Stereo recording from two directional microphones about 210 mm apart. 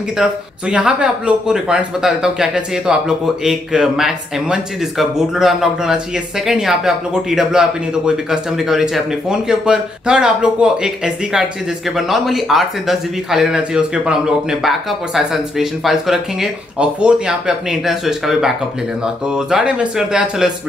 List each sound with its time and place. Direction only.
0.2 s speech: 5° right (ahead or behind)
11.9 s speech: centre (ahead or behind)